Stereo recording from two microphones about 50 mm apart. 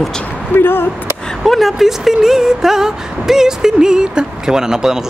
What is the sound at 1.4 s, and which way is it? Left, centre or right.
Speech, centre.